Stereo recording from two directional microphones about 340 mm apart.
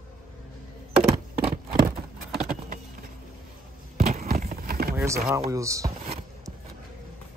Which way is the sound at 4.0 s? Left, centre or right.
Right.